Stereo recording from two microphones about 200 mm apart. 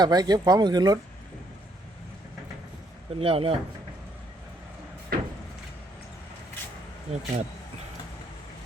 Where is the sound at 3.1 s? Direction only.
30° right (ahead or behind).